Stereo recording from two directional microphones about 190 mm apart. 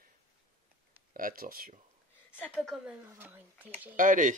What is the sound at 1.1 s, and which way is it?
Speech, 50° right (ahead or behind).